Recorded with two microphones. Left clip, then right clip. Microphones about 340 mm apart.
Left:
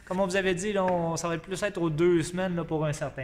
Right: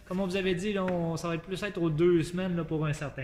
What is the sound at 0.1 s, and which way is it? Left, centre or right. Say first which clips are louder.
Speech: left 4 dB; left.